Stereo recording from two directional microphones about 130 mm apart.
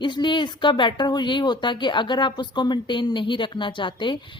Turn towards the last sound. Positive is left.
turn(degrees=40)  # may be behind; listen again after turning